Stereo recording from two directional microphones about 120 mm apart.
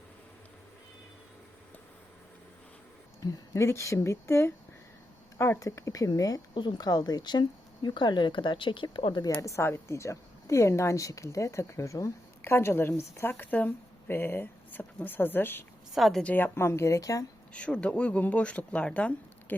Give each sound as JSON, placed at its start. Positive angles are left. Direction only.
{"t": 3.5, "sound": "a woman's voice", "side_deg": 25}
{"t": 9.4, "sound": "a woman's voice", "side_deg": 25}
{"t": 16.0, "sound": "a woman's voice", "side_deg": 0}
{"t": 16.2, "sound": "a woman's voice", "side_deg": 15}
{"t": 17.5, "sound": "speech", "side_deg": 10}